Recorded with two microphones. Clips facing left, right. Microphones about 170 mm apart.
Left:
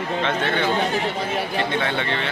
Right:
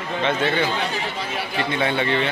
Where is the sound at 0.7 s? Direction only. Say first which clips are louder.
Left 4 dB; 50° left (ahead or behind).